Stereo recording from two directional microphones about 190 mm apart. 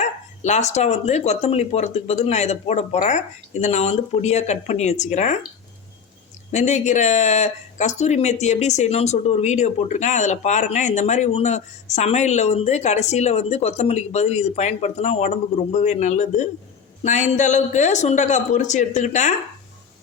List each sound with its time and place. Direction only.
0.0 s speech: 35° left (ahead or behind)
6.5 s speech: 40° left (ahead or behind)